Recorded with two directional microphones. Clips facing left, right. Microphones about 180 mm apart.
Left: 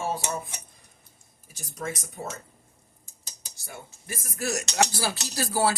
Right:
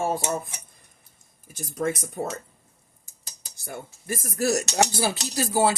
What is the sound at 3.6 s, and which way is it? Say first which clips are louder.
Speech: right 7 dB; 50° right (ahead or behind).